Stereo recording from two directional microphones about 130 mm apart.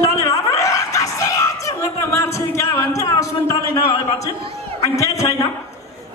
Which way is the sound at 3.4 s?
25° left (ahead or behind).